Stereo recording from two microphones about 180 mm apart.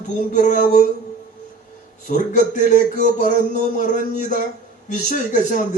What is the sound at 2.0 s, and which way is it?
A man's voice, 45° left (ahead or behind).